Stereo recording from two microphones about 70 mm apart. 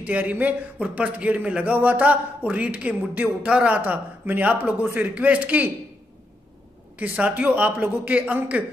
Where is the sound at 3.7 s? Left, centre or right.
Right.